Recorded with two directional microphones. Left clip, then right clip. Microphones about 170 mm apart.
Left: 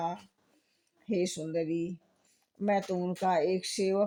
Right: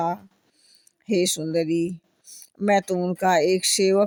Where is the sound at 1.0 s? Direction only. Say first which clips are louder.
Right 9 dB; 35° right (ahead or behind).